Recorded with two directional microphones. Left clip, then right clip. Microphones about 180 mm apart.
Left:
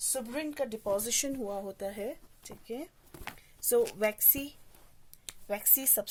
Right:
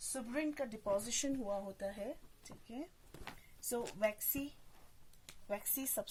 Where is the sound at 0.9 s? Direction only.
55° left (ahead or behind).